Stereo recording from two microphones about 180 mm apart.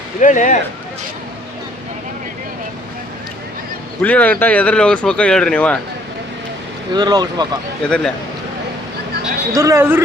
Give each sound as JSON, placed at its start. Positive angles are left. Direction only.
{"t": 0.2, "sound": "speech", "side_deg": 45}
{"t": 4.0, "sound": "speech", "side_deg": 10}
{"t": 6.9, "sound": "speech", "side_deg": -20}
{"t": 7.9, "sound": "speech", "side_deg": 5}
{"t": 9.6, "sound": "speech", "side_deg": -15}